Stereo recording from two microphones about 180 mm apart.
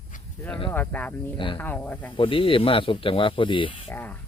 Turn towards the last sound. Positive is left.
turn(degrees=10)  # may be behind; listen again after turning